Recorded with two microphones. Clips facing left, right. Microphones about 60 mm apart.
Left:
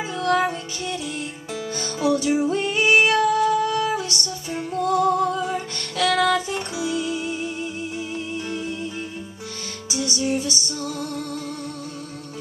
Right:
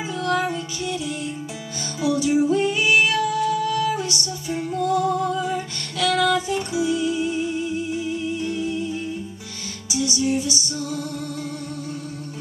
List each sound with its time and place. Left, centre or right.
0.2 s music: left
2.2 s female singing: left
3.4 s music: left
4.8 s music: left
6.7 s music: right
9.8 s music: left